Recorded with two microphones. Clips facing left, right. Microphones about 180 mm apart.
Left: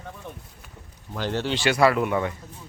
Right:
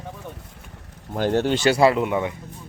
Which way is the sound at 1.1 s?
50° right (ahead or behind).